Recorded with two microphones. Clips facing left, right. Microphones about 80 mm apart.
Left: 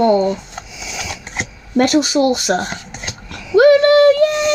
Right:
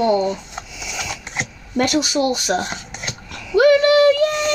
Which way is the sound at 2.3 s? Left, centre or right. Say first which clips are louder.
Left 4 dB; left.